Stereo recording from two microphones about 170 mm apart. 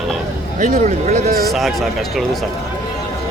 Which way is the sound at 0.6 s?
45° right (ahead or behind).